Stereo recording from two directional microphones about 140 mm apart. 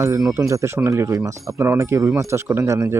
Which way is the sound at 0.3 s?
20° right (ahead or behind).